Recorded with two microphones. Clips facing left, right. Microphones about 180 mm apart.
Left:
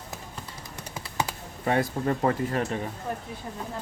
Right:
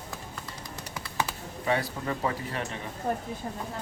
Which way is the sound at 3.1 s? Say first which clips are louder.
Right 7 dB; 55° right (ahead or behind).